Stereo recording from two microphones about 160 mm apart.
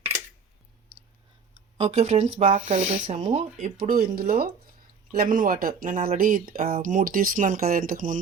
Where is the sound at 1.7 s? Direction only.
40° right (ahead or behind).